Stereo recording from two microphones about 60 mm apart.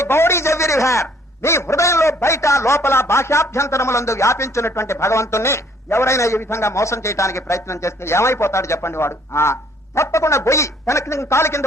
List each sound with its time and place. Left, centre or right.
0.0 s a man's voice: left